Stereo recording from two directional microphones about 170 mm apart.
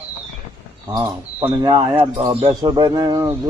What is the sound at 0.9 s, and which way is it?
Speech, 20° right (ahead or behind).